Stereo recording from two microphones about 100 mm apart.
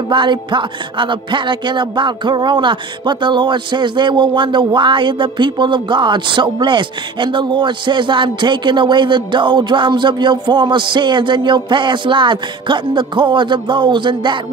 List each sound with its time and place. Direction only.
0.1 s speech: 50° right (ahead or behind)